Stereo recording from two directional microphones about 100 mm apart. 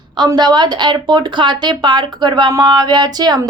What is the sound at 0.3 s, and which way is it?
Speech, 45° right (ahead or behind).